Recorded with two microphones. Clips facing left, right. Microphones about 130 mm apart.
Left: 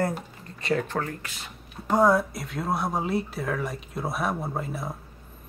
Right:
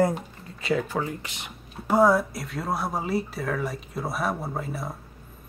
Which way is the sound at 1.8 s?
5° right (ahead or behind).